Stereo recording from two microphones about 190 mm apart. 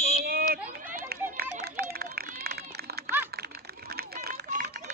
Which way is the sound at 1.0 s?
55° right (ahead or behind).